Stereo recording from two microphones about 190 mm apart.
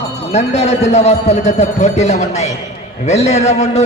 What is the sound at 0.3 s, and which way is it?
A man's voice, 35° left (ahead or behind).